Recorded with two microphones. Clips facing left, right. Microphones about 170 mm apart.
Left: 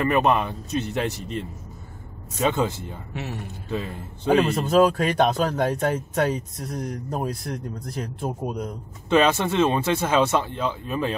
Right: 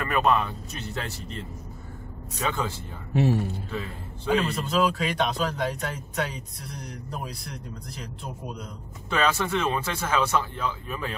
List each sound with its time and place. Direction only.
0.0 s speech: 20° left (ahead or behind)
2.4 s speech: 20° left (ahead or behind)
3.1 s a man's voice: 35° right (ahead or behind)
3.7 s speech: 20° left (ahead or behind)
4.6 s speech: 50° left (ahead or behind)
9.1 s speech: 20° left (ahead or behind)